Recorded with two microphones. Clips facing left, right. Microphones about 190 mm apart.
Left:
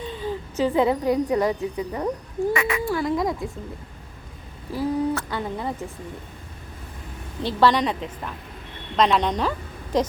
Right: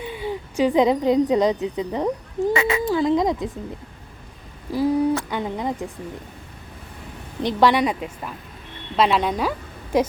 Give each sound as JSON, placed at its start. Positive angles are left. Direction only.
{"t": 0.0, "sound": "a woman's voice", "side_deg": -10}
{"t": 4.7, "sound": "speech", "side_deg": -15}
{"t": 7.4, "sound": "speech", "side_deg": -15}